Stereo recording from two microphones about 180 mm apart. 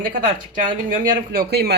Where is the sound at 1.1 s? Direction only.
60° right (ahead or behind).